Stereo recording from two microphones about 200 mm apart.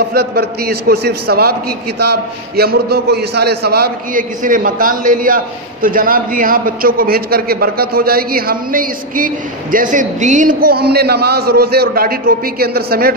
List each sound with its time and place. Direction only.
0.1 s a man's voice: 55° right (ahead or behind)